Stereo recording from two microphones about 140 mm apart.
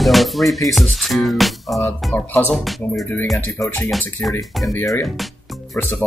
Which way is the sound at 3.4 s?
15° left (ahead or behind).